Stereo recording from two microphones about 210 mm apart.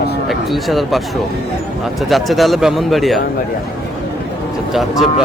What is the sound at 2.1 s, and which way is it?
Speech, centre (ahead or behind).